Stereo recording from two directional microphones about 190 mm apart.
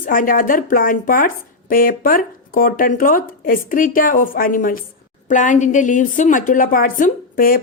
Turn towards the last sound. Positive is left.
turn(degrees=50)  # may be behind; listen again after turning